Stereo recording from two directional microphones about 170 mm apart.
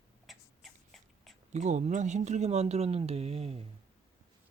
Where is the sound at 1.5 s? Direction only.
45° right (ahead or behind).